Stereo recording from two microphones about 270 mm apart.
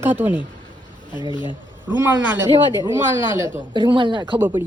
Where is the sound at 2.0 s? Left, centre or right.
Centre.